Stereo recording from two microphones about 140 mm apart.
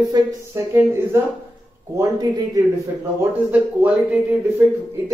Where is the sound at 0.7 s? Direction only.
15° right (ahead or behind).